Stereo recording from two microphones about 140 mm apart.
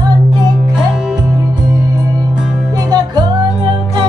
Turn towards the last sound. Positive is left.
turn(degrees=-30)  # may be behind; listen again after turning